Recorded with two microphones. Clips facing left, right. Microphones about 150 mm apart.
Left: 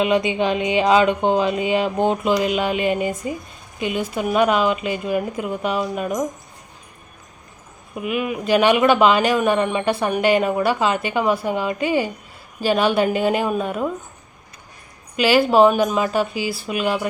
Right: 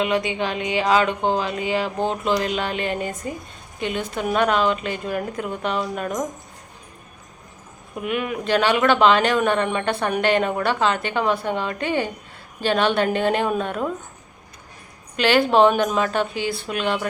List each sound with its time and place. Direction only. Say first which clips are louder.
0.0 s speech: left 4 dB; 20° left (ahead or behind)
7.9 s speech: left 2 dB; 5° left (ahead or behind)
15.1 s speech: left 2 dB; 5° left (ahead or behind)